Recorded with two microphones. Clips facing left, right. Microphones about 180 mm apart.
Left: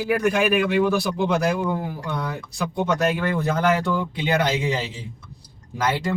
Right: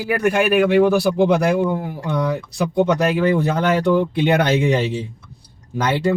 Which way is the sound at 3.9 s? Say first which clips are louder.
Right 6 dB; 65° right (ahead or behind).